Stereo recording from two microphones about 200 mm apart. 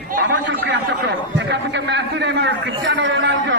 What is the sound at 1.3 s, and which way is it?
A man's voice, 60° right (ahead or behind).